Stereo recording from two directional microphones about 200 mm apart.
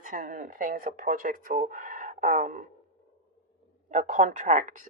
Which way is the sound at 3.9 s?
40° right (ahead or behind).